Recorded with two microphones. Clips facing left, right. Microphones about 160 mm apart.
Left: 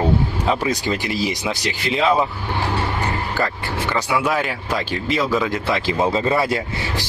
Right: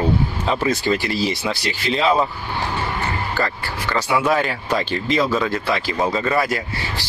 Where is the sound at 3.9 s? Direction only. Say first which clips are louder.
Right 2 dB; 10° left (ahead or behind).